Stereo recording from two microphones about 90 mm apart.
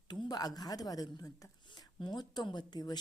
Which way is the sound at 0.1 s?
45° left (ahead or behind).